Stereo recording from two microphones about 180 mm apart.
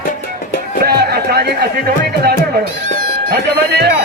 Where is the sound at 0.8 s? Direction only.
60° right (ahead or behind).